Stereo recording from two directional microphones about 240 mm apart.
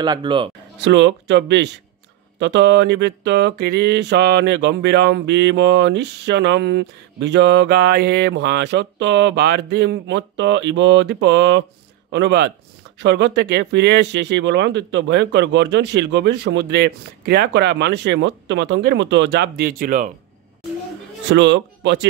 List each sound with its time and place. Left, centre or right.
0.0 s speech: centre
0.8 s a sound: right
21.3 s a man's voice: right